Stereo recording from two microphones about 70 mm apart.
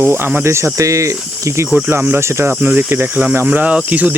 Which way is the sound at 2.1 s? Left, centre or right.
Right.